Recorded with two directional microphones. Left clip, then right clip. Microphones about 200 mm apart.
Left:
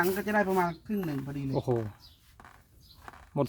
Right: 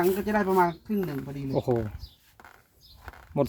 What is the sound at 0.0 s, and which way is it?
Speech, 5° right (ahead or behind).